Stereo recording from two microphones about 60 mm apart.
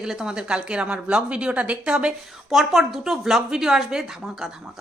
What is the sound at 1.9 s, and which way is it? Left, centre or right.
A woman's voice, centre.